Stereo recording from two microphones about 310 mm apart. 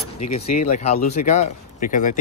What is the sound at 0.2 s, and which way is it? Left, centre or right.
Speech, left.